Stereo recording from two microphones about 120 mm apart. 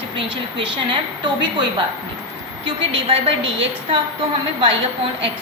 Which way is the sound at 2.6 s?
50° right (ahead or behind).